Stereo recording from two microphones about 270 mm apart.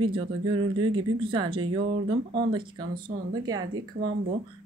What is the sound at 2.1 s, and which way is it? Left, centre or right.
Speech, right.